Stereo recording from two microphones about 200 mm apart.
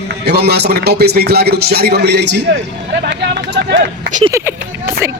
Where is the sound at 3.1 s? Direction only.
60° right (ahead or behind).